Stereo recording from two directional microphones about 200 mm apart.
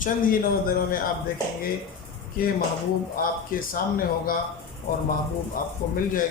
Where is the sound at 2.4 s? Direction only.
45° left (ahead or behind).